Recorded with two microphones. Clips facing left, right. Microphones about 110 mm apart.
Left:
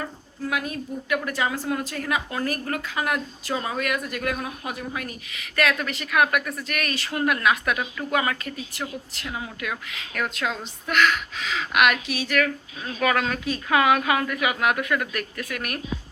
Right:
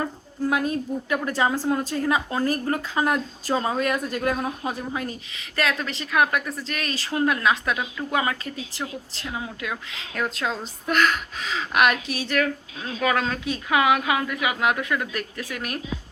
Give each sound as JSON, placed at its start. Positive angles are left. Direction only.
{"t": 0.5, "sound": "a woman's voice", "side_deg": -30}
{"t": 10.2, "sound": "a woman's voice", "side_deg": -30}